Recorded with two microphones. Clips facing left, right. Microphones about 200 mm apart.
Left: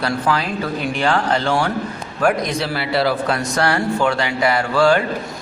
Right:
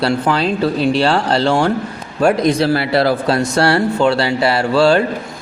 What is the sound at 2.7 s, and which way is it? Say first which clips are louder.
Speech: right 4 dB; 40° right (ahead or behind).